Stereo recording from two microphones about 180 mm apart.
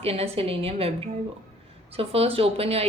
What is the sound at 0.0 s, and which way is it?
A woman's voice, 35° right (ahead or behind).